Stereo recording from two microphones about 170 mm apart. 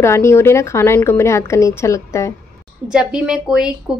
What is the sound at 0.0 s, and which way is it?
A woman's voice, 15° left (ahead or behind).